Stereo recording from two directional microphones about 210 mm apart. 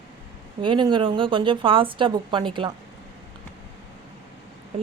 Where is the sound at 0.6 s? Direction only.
20° right (ahead or behind).